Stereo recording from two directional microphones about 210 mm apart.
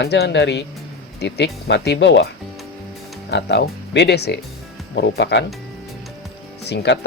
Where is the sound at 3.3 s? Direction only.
55° left (ahead or behind).